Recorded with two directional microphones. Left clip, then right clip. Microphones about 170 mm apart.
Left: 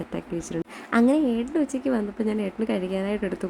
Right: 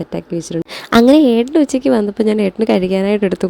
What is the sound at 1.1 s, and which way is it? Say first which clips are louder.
A woman's voice: right 13 dB; 55° right (ahead or behind).